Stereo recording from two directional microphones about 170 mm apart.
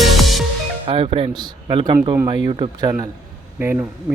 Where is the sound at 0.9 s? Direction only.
35° right (ahead or behind).